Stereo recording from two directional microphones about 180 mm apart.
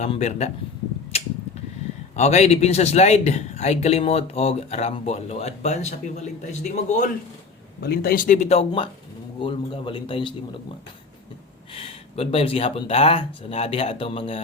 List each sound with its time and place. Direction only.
0.0 s a man's voice: 40° left (ahead or behind)
1.1 s a sound: 35° left (ahead or behind)
2.1 s a man's voice: 40° left (ahead or behind)
7.8 s a man's voice: 60° left (ahead or behind); by 10.3 s 25° left (ahead or behind)
11.7 s a man's voice: 35° left (ahead or behind)